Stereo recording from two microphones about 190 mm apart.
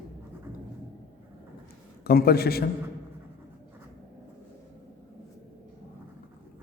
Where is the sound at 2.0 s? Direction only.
55° left (ahead or behind).